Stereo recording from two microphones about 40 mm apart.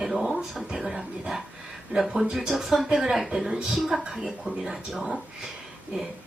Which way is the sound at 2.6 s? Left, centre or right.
Centre.